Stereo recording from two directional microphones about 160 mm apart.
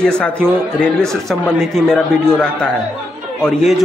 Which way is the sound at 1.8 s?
5° left (ahead or behind).